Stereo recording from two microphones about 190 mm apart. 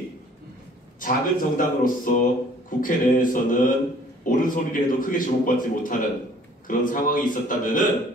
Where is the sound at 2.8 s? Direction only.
45° left (ahead or behind).